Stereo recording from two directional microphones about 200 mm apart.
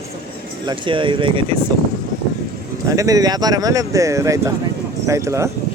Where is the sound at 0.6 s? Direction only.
25° right (ahead or behind).